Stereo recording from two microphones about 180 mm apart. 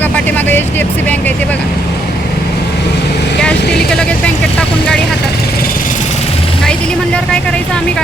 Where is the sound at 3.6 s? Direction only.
65° left (ahead or behind).